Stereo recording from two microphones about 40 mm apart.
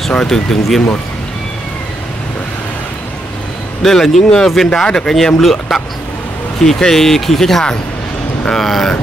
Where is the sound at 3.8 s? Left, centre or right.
Centre.